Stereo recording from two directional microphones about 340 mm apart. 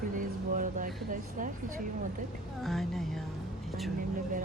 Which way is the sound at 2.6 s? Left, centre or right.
Centre.